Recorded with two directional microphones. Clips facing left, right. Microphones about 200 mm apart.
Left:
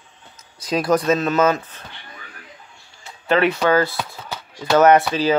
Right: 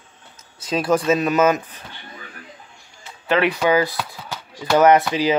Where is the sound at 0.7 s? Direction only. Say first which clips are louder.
Even; 5° right (ahead or behind).